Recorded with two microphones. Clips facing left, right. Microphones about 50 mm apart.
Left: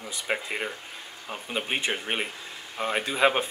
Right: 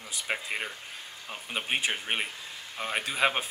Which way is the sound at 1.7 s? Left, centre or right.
Centre.